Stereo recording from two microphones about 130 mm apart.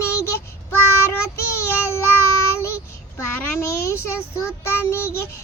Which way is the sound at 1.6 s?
20° left (ahead or behind).